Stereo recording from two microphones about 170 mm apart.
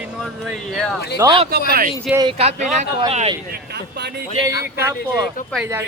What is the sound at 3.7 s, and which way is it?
Speech, 75° right (ahead or behind).